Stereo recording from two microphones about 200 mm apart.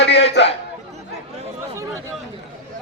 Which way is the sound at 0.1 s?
60° left (ahead or behind).